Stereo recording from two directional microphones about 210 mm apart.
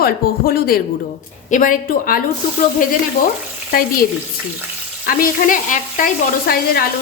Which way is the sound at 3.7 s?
40° left (ahead or behind).